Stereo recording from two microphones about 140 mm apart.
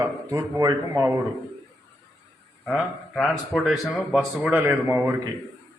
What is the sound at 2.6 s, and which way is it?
Speech, centre (ahead or behind).